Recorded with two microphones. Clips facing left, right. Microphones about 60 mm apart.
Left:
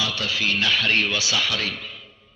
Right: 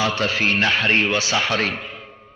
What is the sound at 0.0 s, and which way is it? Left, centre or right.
A man's voice, right.